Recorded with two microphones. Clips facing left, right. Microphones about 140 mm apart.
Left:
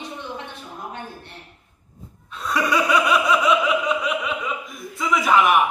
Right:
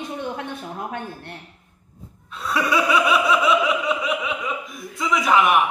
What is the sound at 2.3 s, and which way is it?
Laughter, centre (ahead or behind).